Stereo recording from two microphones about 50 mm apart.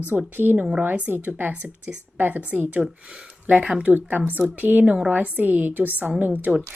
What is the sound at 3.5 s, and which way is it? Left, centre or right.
Speech, right.